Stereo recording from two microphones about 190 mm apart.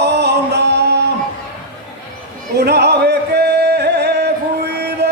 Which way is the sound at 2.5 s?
60° right (ahead or behind).